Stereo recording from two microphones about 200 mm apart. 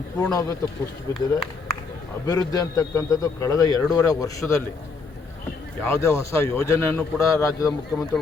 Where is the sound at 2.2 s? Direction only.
20° left (ahead or behind).